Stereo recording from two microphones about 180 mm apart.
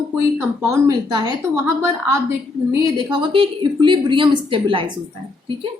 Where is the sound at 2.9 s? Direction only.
25° right (ahead or behind).